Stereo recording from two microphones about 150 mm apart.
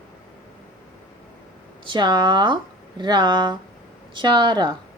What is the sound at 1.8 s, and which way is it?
Speech, 30° right (ahead or behind).